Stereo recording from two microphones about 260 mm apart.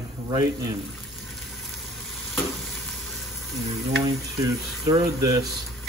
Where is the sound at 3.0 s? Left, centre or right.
Centre.